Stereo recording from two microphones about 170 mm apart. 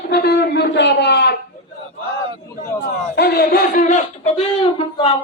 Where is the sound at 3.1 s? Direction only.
70° left (ahead or behind); by 5.1 s 35° left (ahead or behind).